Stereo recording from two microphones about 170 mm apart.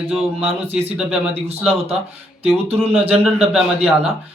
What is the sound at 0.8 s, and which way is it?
Speech, 5° right (ahead or behind).